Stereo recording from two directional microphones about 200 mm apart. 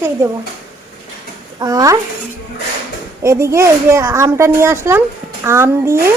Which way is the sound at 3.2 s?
15° right (ahead or behind).